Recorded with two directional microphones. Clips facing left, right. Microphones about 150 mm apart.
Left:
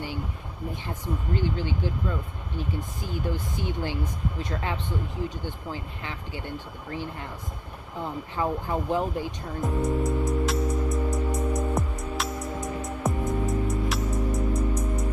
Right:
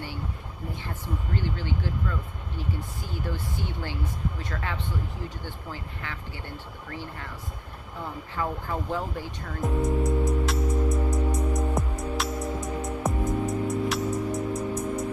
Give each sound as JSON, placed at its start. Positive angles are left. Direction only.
{"t": 0.7, "sound": "speech", "side_deg": 20}
{"t": 9.6, "sound": "music", "side_deg": 0}